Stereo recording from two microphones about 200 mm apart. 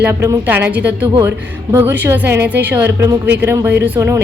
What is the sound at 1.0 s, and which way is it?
Speech, 25° right (ahead or behind).